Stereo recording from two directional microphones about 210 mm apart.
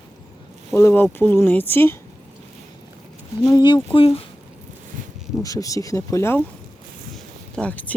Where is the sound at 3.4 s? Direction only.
20° left (ahead or behind).